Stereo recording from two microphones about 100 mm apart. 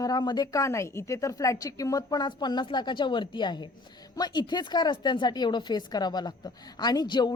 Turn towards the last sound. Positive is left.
turn(degrees=45)  # may be behind; listen again after turning